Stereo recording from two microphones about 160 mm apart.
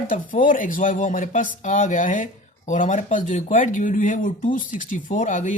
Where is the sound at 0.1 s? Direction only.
60° left (ahead or behind).